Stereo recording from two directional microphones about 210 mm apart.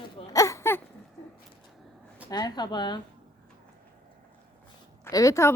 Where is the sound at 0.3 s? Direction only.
15° left (ahead or behind).